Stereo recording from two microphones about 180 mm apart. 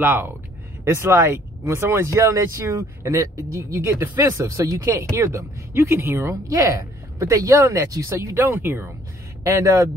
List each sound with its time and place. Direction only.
0.0 s speech: 10° right (ahead or behind)